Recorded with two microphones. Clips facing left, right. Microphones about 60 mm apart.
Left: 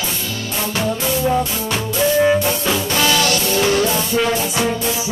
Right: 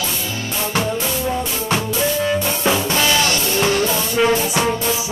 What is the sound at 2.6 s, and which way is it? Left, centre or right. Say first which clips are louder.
Music: even; centre.